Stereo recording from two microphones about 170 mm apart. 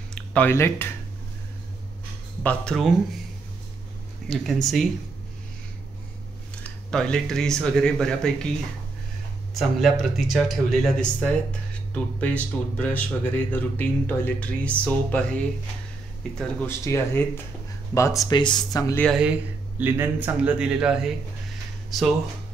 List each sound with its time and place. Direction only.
0.1 s speech: 10° left (ahead or behind)
2.4 s speech: 5° left (ahead or behind)
4.3 s speech: centre (ahead or behind)
6.6 s speech: 5° left (ahead or behind)
9.6 s speech: centre (ahead or behind); by 18.9 s 20° left (ahead or behind)
19.1 s speech: 5° right (ahead or behind)